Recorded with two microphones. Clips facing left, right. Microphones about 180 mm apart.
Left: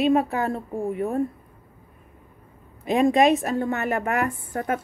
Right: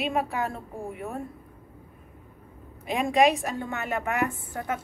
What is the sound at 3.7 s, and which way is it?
Speech, 45° left (ahead or behind).